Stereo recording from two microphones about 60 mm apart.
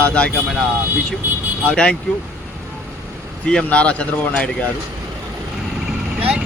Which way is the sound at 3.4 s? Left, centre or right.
Centre.